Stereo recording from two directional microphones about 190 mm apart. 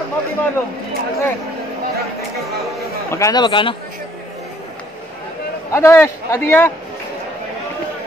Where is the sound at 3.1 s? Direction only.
15° left (ahead or behind).